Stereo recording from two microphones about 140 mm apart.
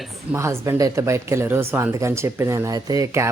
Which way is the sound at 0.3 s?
20° right (ahead or behind).